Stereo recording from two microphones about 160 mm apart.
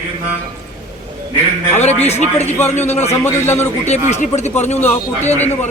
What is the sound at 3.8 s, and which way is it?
Speech, 45° left (ahead or behind).